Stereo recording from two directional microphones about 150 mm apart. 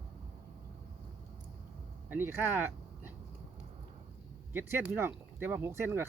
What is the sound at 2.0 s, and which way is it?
Speech, 15° right (ahead or behind).